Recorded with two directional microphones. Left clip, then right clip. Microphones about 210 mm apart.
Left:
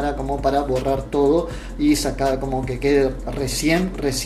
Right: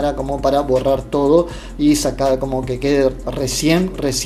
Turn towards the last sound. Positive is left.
turn(degrees=-40)  # may be behind; listen again after turning